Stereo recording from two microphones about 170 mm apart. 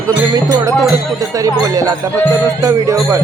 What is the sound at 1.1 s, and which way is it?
Music, 20° right (ahead or behind).